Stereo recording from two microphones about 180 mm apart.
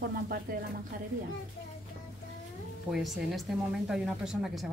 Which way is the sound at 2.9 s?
Centre (ahead or behind).